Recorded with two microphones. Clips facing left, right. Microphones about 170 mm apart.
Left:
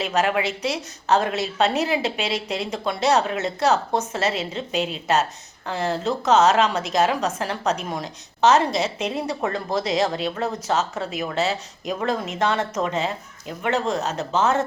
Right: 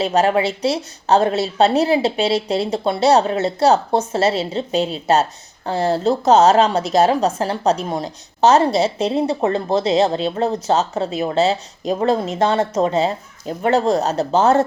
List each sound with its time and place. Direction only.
0.0 s a woman's voice: 30° right (ahead or behind)